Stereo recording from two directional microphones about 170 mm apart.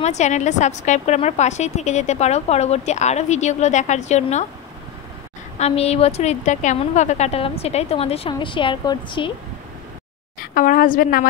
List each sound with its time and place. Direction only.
0.0 s a woman's voice: 45° left (ahead or behind)
5.6 s a woman's voice: 35° left (ahead or behind)
10.4 s a woman's voice: 55° left (ahead or behind)